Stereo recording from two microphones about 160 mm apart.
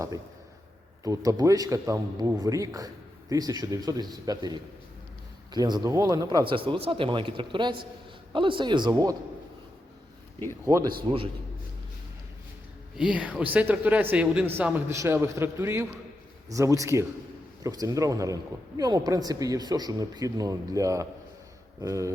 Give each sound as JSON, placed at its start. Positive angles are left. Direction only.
{"t": 1.0, "sound": "a man's voice", "side_deg": -20}
{"t": 10.7, "sound": "a man's voice", "side_deg": -20}
{"t": 13.0, "sound": "a man's voice", "side_deg": -10}